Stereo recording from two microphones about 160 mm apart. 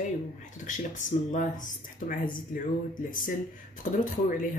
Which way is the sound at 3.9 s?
55° left (ahead or behind).